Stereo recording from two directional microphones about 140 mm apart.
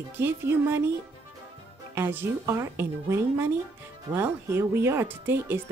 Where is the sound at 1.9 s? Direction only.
15° right (ahead or behind).